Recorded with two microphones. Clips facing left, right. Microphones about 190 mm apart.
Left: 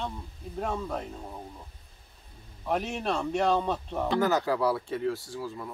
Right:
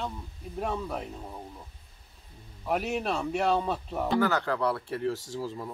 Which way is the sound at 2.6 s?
Centre (ahead or behind).